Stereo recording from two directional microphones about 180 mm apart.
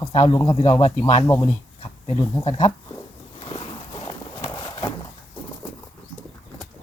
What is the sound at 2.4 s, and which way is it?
Speech, 30° left (ahead or behind).